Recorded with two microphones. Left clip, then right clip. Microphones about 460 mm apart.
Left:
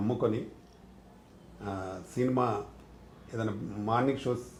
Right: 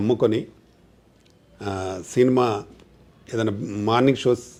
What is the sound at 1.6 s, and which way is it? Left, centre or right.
Speech, right.